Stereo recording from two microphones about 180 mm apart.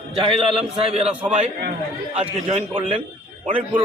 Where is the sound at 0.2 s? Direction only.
30° right (ahead or behind).